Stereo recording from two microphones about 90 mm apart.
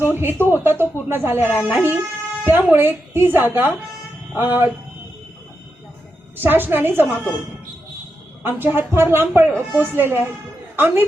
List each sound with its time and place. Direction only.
0.1 s a woman's voice: 25° right (ahead or behind)
6.3 s a woman's voice: 25° right (ahead or behind)
8.4 s a woman's voice: 25° right (ahead or behind)